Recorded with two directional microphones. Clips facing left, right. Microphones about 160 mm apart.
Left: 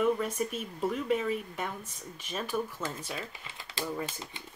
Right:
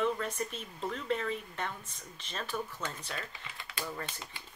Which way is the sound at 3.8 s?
20° left (ahead or behind).